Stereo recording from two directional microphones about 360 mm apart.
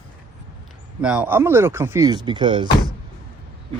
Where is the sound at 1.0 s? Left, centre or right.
Centre.